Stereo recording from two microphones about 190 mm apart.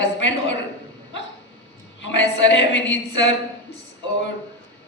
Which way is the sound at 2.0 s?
70° left (ahead or behind).